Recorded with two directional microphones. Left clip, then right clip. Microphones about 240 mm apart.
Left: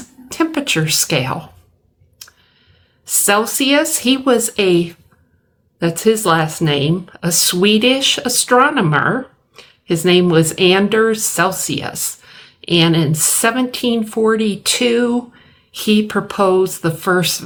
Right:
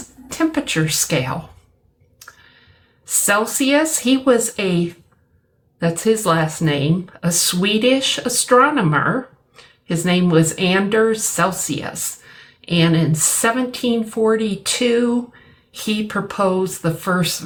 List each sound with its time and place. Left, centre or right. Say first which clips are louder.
0.3 s speech: left 3 dB; left
3.2 s speech: left 3 dB; left